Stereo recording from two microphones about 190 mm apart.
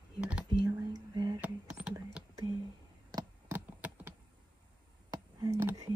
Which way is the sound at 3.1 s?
20° right (ahead or behind).